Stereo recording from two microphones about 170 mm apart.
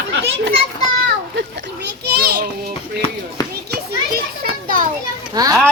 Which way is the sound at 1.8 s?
70° right (ahead or behind).